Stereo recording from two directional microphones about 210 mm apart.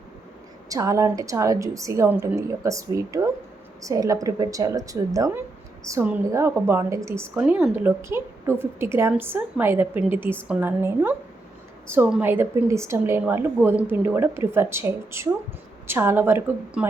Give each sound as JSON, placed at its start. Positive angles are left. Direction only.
{"t": 0.7, "sound": "a woman's voice", "side_deg": -15}